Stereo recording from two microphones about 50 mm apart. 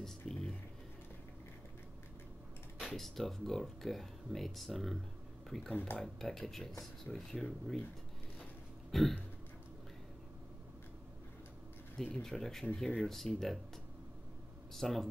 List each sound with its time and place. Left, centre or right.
0.0 s a sound: centre
2.8 s speech: centre
5.7 s speech: left
6.1 s speech: centre
8.9 s speech: centre
12.0 s speech: centre
14.7 s speech: centre